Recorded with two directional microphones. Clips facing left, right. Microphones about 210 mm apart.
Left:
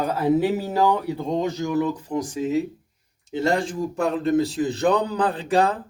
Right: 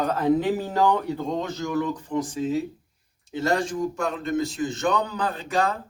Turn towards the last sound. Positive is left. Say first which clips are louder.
# left 4 dB
turn(degrees=30)  # may be behind; listen again after turning